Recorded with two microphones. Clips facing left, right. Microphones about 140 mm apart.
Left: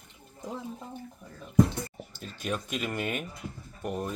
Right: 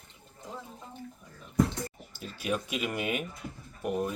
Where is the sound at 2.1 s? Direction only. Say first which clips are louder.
Right 1 dB; 5° right (ahead or behind).